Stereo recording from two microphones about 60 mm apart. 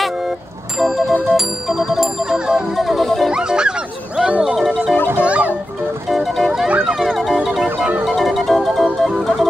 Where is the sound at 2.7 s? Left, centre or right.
Centre.